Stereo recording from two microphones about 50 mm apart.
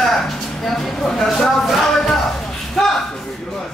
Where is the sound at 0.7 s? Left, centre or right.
Centre.